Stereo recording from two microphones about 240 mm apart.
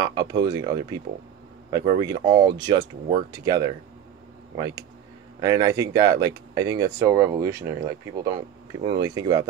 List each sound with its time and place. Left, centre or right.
0.0 s speech: centre